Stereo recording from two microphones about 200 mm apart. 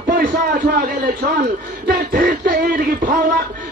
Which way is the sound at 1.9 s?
45° right (ahead or behind).